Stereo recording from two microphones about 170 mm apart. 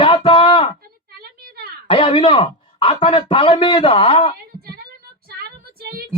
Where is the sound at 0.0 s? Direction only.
30° left (ahead or behind).